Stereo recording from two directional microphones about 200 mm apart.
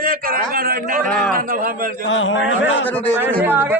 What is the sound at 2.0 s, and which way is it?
Speech, 70° left (ahead or behind).